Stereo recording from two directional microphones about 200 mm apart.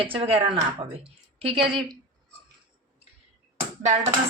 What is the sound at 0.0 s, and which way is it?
Speech, 25° right (ahead or behind).